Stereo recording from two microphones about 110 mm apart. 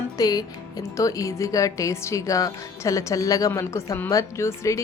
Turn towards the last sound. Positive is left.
turn(degrees=25)  # may be behind; listen again after turning